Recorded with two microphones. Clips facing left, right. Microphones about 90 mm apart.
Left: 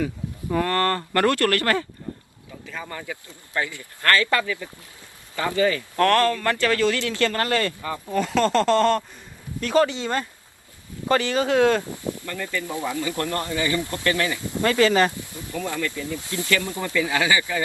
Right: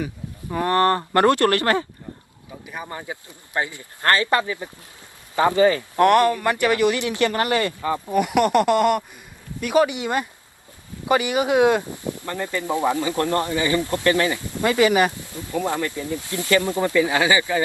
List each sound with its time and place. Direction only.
0.5 s speech: 20° right (ahead or behind)
2.0 s a sound: 20° right (ahead or behind)
2.5 s speech: 20° right (ahead or behind)
7.8 s speech: 40° right (ahead or behind)
8.0 s speech: 15° right (ahead or behind)